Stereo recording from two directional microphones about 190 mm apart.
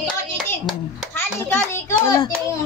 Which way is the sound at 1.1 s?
15° left (ahead or behind).